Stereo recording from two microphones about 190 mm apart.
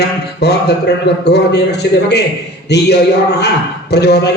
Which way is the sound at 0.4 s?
60° left (ahead or behind).